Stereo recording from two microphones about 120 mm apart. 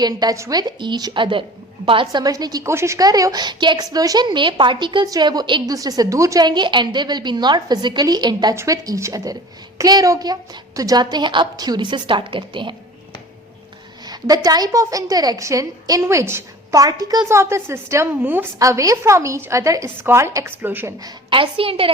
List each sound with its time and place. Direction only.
0.0 s a woman's voice: 30° right (ahead or behind)
2.2 s a woman's voice: 30° right (ahead or behind)
14.0 s a woman's voice: 35° right (ahead or behind); by 18.4 s 15° right (ahead or behind)
18.6 s a woman's voice: 30° right (ahead or behind)
21.0 s a woman's voice: 45° right (ahead or behind)